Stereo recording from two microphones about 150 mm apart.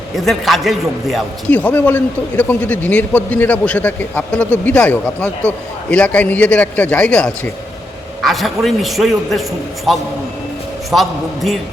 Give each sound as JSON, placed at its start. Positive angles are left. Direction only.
{"t": 0.3, "sound": "a man's voice", "side_deg": 0}
{"t": 1.5, "sound": "a man's voice", "side_deg": 10}
{"t": 10.9, "sound": "a man's voice", "side_deg": 0}